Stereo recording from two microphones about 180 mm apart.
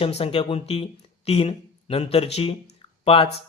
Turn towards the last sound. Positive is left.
turn(degrees=30)  # may be behind; listen again after turning